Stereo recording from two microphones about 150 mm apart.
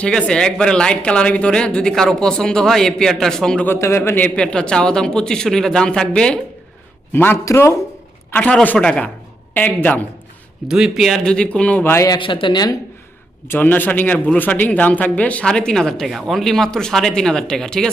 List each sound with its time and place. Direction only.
0.0 s speech: 5° left (ahead or behind)
10.7 s speech: 5° right (ahead or behind); by 12.7 s 30° left (ahead or behind)
13.5 s speech: 15° left (ahead or behind)